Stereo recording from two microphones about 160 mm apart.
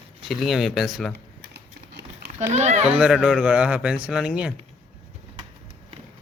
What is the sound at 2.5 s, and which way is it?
Speech, 45° right (ahead or behind).